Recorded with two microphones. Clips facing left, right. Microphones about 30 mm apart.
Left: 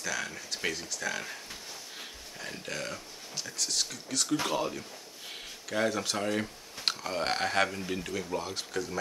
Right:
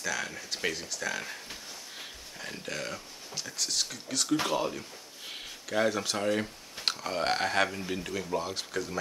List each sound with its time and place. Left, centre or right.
0.0 s speech: centre